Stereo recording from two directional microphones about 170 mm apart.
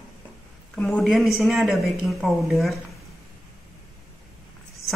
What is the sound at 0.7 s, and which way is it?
A woman's voice, centre (ahead or behind).